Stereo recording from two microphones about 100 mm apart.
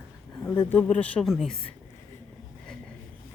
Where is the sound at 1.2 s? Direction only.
Centre (ahead or behind).